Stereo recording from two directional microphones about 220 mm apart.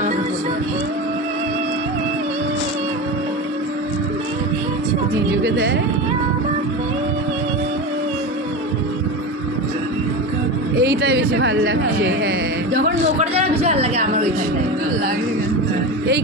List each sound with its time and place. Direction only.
5.4 s speech: 50° right (ahead or behind)
10.8 s speech: 50° right (ahead or behind)
13.2 s a man's voice: 30° right (ahead or behind)